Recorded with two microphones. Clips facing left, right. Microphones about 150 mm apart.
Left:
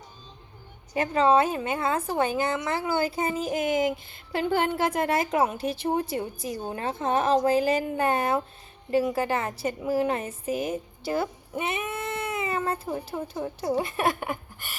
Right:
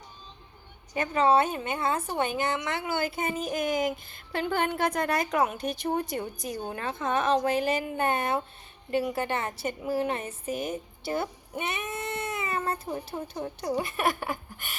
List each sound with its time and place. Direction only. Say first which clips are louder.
1.1 s a woman's voice: left 2 dB; 30° left (ahead or behind)